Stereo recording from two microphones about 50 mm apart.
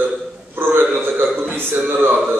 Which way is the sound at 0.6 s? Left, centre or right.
Right.